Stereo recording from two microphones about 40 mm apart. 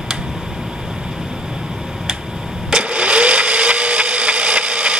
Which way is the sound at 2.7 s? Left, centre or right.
Right.